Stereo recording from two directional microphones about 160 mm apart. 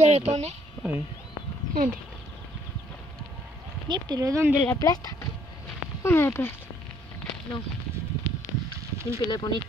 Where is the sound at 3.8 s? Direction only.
25° right (ahead or behind).